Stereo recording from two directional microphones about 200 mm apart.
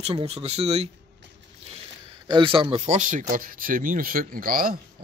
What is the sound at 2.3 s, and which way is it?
Speech, 25° right (ahead or behind).